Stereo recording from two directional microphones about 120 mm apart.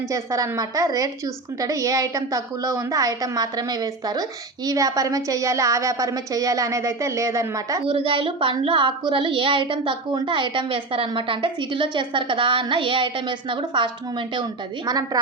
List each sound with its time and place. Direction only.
0.1 s a woman's voice: 30° right (ahead or behind)
7.9 s a woman's voice: 45° right (ahead or behind); by 15.2 s 30° right (ahead or behind)